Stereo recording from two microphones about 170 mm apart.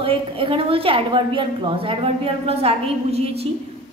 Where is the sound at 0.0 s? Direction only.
30° right (ahead or behind).